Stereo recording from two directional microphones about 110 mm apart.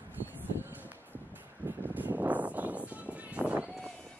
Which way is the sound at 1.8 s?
15° right (ahead or behind).